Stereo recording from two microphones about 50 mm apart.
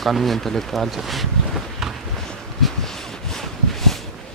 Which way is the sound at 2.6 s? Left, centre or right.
Centre.